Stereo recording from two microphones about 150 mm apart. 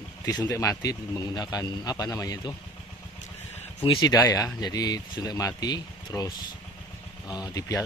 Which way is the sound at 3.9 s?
25° left (ahead or behind).